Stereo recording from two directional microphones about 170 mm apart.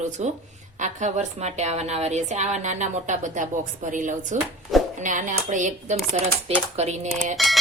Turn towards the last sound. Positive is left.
turn(degrees=0)  # may be behind; listen again after turning